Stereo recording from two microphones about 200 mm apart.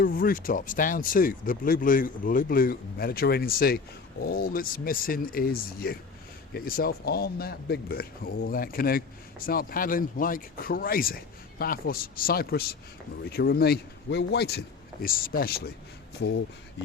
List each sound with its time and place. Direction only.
0.0 s speech: 45° left (ahead or behind)